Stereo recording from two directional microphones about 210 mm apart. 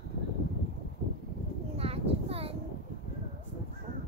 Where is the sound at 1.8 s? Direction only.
30° right (ahead or behind).